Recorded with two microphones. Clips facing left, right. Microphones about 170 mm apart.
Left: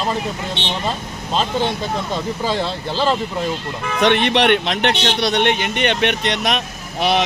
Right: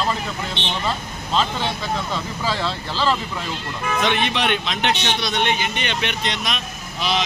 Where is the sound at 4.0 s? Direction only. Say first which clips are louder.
Left 7 dB; 65° left (ahead or behind).